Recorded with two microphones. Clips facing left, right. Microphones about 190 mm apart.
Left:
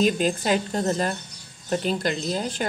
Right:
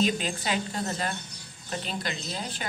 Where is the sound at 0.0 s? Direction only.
45° left (ahead or behind).